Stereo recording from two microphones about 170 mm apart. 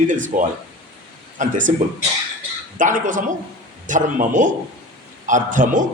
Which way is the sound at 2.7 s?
50° right (ahead or behind).